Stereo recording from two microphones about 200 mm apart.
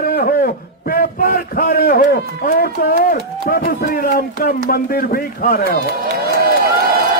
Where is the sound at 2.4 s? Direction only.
50° left (ahead or behind).